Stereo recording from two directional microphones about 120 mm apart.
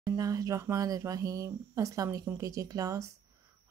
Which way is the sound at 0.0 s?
30° right (ahead or behind).